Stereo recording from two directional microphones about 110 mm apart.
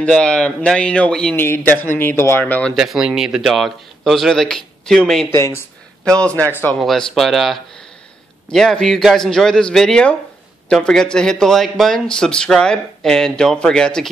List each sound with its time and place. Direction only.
0.0 s speech: 10° left (ahead or behind)
1.3 s speech: 20° left (ahead or behind)
2.7 s speech: centre (ahead or behind)
5.3 s speech: 25° left (ahead or behind)
6.0 s speech: 10° left (ahead or behind)
6.8 s speech: centre (ahead or behind)